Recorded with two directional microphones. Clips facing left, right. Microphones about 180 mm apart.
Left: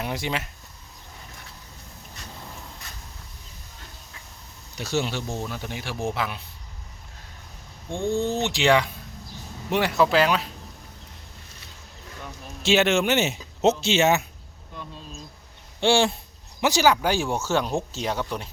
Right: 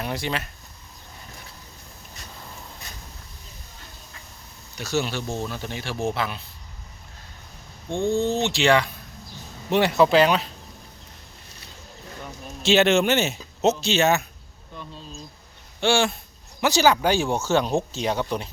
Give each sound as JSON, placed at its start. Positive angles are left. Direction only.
{"t": 0.0, "sound": "speech", "side_deg": 15}
{"t": 4.8, "sound": "speech", "side_deg": 25}
{"t": 5.4, "sound": "speech", "side_deg": 10}
{"t": 7.9, "sound": "speech", "side_deg": -20}
{"t": 8.4, "sound": "speech", "side_deg": 15}
{"t": 9.6, "sound": "speech", "side_deg": 0}
{"t": 12.6, "sound": "speech", "side_deg": 5}
{"t": 13.1, "sound": "speech", "side_deg": 15}
{"t": 15.8, "sound": "speech", "side_deg": 30}
{"t": 16.6, "sound": "speech", "side_deg": 15}
{"t": 17.6, "sound": "speech", "side_deg": -25}